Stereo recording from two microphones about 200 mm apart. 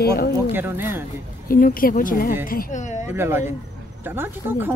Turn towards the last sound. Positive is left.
turn(degrees=-10)  # may be behind; listen again after turning